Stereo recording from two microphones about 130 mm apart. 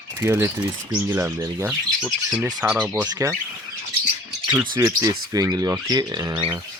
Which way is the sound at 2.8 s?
10° right (ahead or behind).